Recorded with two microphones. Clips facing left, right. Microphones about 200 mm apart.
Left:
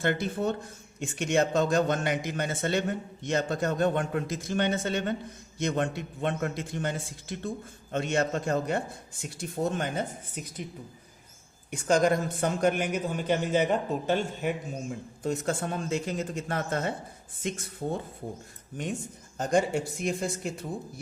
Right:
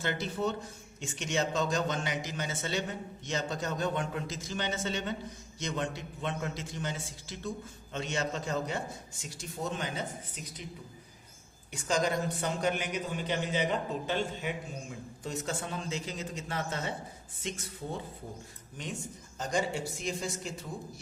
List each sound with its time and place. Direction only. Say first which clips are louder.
0.0 s a man's voice: left 4 dB; 55° left (ahead or behind)
11.7 s speech: left 6 dB; 55° left (ahead or behind)
19.4 s a man's voice: left 6 dB; 55° left (ahead or behind)